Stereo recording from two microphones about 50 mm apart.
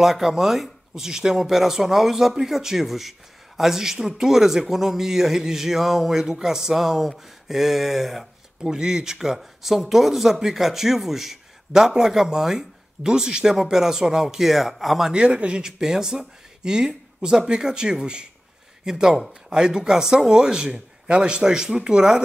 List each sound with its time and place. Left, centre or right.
0.0 s speech: centre
15.1 s speech: centre